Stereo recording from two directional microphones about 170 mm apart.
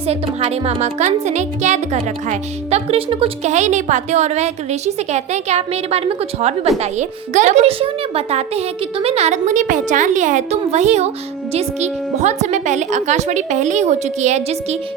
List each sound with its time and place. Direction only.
0.0 s a woman's voice: 35° right (ahead or behind)